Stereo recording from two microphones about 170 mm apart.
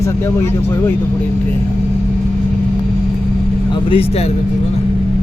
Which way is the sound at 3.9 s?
35° left (ahead or behind).